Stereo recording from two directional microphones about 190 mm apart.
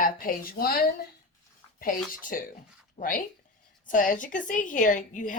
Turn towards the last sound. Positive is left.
turn(degrees=45)  # may be behind; listen again after turning